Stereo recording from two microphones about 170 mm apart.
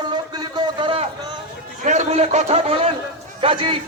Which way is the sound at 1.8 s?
45° right (ahead or behind).